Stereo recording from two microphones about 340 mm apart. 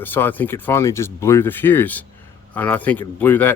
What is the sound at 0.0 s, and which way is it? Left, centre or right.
Speech, centre.